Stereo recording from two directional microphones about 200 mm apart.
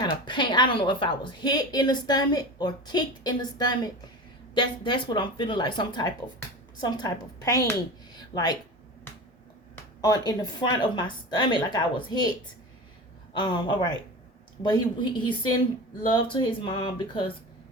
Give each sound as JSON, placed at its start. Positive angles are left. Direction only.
{"t": 0.0, "sound": "speech", "side_deg": 20}
{"t": 9.7, "sound": "a sound", "side_deg": 20}
{"t": 10.8, "sound": "speech", "side_deg": 20}
{"t": 13.3, "sound": "speech", "side_deg": 25}